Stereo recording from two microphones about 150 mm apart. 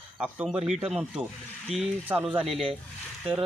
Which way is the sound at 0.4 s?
5° right (ahead or behind).